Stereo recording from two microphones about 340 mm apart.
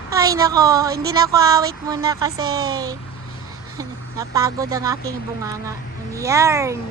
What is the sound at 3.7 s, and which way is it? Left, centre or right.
Speech, centre.